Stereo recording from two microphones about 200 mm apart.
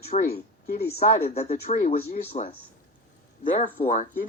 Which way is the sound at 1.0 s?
35° left (ahead or behind).